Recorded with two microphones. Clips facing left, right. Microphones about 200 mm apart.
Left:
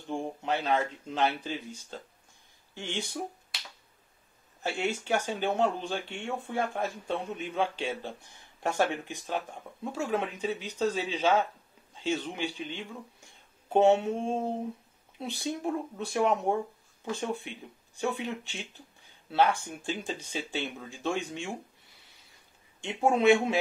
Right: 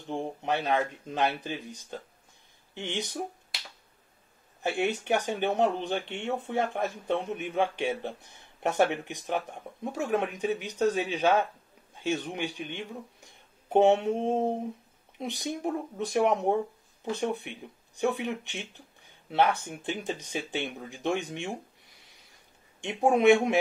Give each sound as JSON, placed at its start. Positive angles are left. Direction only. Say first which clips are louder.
{"t": 0.0, "sound": "speech", "louder": "right 1 dB", "side_deg": -20}
{"t": 4.6, "sound": "speech", "louder": "right 3 dB", "side_deg": -15}
{"t": 22.8, "sound": "speech", "louder": "right 2 dB", "side_deg": -20}